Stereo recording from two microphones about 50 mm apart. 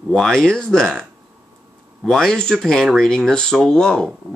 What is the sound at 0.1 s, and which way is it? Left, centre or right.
Speech, centre.